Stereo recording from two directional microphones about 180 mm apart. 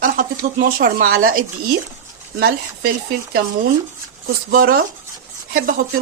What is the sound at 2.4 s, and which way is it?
Speech, 60° right (ahead or behind).